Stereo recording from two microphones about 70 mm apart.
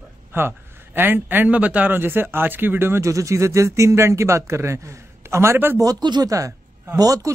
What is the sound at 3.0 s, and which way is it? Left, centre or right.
Speech, right.